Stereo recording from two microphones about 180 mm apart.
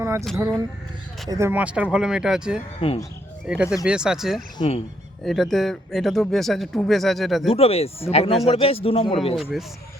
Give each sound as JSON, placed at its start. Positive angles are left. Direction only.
{"t": 0.0, "sound": "a sound", "side_deg": -15}
{"t": 0.3, "sound": "speech", "side_deg": -15}
{"t": 2.8, "sound": "speech", "side_deg": 30}
{"t": 3.4, "sound": "speech", "side_deg": -5}
{"t": 4.5, "sound": "speech", "side_deg": 35}
{"t": 5.2, "sound": "speech", "side_deg": 0}
{"t": 7.5, "sound": "speech", "side_deg": 35}
{"t": 9.3, "sound": "speech", "side_deg": 0}